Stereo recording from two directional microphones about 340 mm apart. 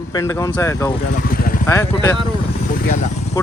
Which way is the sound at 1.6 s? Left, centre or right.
Centre.